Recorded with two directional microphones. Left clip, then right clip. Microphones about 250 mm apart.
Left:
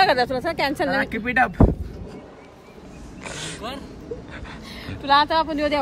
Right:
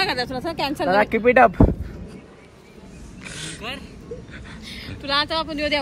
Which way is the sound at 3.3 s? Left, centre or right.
Centre.